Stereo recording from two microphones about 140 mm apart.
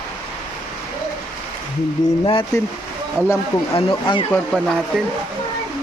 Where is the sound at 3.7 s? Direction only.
35° left (ahead or behind).